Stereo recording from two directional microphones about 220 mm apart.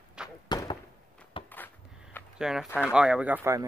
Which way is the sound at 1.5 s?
10° left (ahead or behind).